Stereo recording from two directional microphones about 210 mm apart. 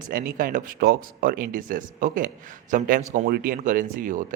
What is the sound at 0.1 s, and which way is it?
Speech, 40° right (ahead or behind).